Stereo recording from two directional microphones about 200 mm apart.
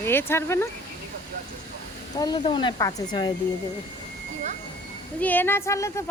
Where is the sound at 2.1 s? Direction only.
20° left (ahead or behind).